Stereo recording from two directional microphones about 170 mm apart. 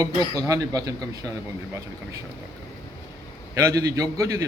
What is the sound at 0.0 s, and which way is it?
Speech, 20° right (ahead or behind).